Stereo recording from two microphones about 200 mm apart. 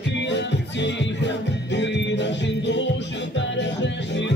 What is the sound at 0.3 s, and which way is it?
Music, 60° left (ahead or behind).